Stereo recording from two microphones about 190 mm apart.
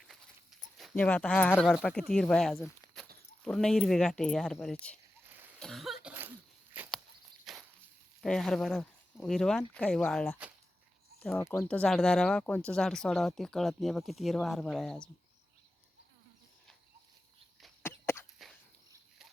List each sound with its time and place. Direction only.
0.8 s speech: 5° left (ahead or behind)
5.5 s cough: centre (ahead or behind)
7.5 s a sound: centre (ahead or behind)
8.2 s speech: 5° left (ahead or behind)
11.3 s speech: 15° left (ahead or behind)
17.8 s a sound: 10° left (ahead or behind)